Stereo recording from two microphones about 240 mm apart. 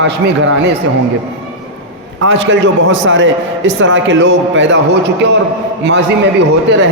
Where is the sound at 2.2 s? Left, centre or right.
Right.